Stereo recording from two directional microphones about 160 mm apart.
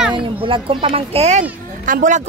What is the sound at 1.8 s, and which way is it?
Speech, 55° right (ahead or behind).